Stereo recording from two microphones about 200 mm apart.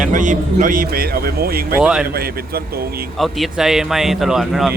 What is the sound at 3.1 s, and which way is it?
A man's voice, centre (ahead or behind).